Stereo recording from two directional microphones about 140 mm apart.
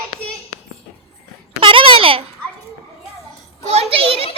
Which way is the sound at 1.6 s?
40° right (ahead or behind).